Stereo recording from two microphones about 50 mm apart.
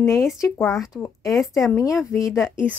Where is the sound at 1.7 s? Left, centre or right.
Left.